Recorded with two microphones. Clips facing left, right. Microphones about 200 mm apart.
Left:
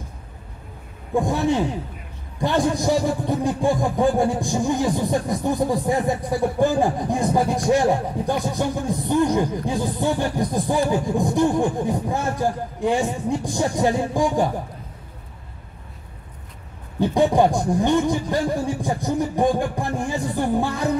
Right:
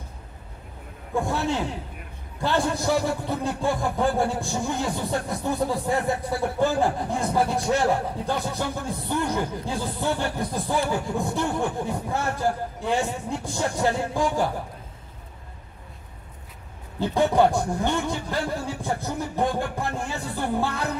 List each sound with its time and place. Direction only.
1.1 s speech: 15° left (ahead or behind)
17.0 s speech: 15° left (ahead or behind)